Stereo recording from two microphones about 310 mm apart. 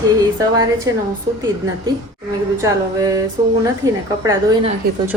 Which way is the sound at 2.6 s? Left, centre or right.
Centre.